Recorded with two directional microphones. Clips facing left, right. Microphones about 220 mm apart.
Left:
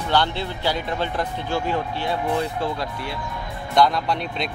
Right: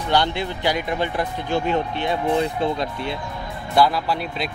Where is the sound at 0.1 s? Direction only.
15° right (ahead or behind).